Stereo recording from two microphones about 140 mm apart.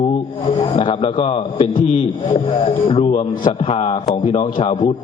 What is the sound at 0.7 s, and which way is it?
A man's voice, 45° left (ahead or behind).